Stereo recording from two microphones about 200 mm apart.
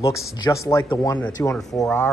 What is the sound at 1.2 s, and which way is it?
Speech, 5° left (ahead or behind).